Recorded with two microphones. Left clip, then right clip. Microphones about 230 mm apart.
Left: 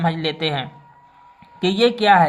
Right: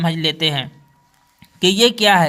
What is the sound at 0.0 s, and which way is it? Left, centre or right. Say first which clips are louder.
A man's voice: right 3 dB; right.